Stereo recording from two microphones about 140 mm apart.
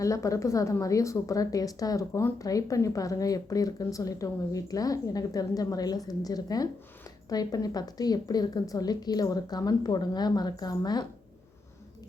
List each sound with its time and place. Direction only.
0.0 s a woman's voice: 25° left (ahead or behind)